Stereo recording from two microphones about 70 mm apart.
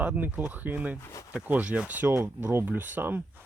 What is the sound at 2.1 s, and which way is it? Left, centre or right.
Speech, right.